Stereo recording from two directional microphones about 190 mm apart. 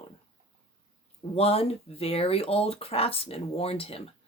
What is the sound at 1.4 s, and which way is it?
Speech, 30° left (ahead or behind).